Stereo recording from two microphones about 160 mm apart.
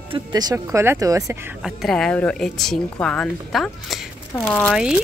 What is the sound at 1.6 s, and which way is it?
Speech, centre (ahead or behind).